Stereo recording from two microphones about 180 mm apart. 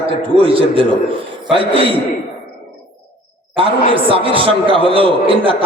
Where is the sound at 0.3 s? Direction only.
30° right (ahead or behind).